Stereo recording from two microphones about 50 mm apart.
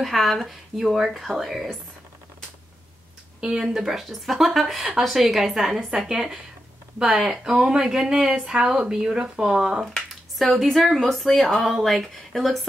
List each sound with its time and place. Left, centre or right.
0.0 s speech: centre
3.3 s speech: centre
3.6 s speech: centre
9.9 s speech: centre